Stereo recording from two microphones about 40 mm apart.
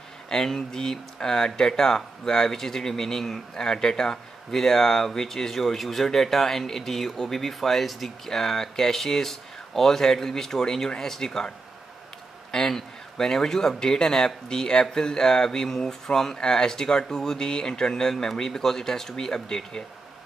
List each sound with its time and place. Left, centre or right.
0.3 s speech: centre